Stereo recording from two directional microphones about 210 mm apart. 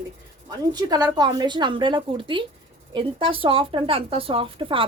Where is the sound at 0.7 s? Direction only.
20° right (ahead or behind).